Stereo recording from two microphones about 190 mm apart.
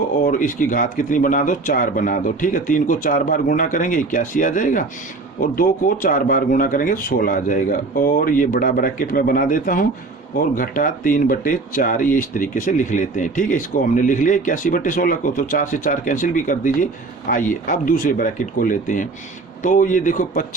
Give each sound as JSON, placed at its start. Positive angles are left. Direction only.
{"t": 0.2, "sound": "speech", "side_deg": 45}